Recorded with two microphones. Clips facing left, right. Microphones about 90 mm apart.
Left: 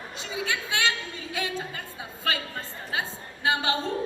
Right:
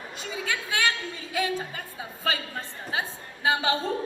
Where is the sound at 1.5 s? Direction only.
20° right (ahead or behind).